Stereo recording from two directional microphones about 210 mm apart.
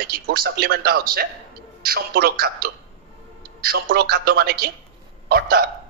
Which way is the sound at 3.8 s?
45° right (ahead or behind).